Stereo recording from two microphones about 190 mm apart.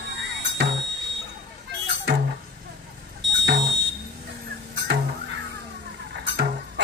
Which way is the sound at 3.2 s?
70° right (ahead or behind).